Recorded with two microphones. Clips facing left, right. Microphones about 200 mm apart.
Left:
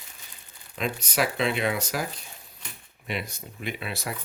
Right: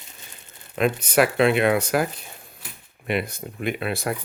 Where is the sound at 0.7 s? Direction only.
60° right (ahead or behind).